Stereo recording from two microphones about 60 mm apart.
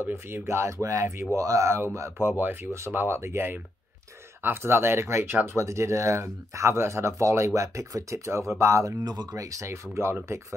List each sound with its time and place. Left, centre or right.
0.0 s speech: right
2.0 s speech: right
5.3 s speech: right
5.6 s speech: right
9.0 s speech: right
9.7 s speech: right